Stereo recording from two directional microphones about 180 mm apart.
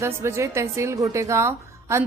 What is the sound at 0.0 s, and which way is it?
A woman's voice, 15° right (ahead or behind).